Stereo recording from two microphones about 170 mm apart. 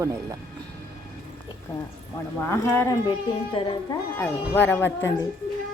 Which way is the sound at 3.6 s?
30° left (ahead or behind).